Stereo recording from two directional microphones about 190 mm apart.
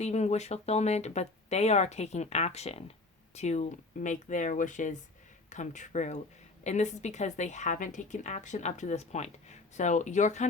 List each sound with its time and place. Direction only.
0.0 s a woman's voice: 35° left (ahead or behind)